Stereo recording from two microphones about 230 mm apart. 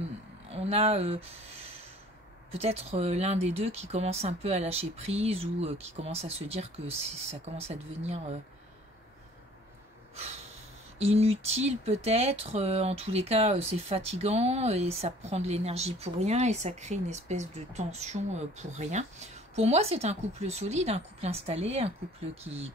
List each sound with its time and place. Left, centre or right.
0.5 s speech: right
11.0 s speech: right